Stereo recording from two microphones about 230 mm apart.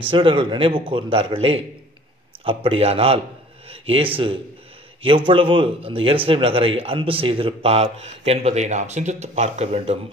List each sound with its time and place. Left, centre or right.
0.1 s speech: right